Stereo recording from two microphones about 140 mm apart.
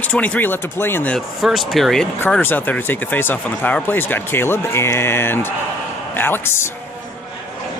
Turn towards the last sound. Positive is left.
turn(degrees=15)  # may be behind; listen again after turning